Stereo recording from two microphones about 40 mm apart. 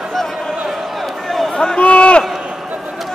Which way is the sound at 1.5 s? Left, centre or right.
Left.